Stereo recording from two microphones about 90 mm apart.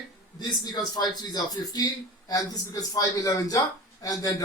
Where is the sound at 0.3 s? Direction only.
50° left (ahead or behind).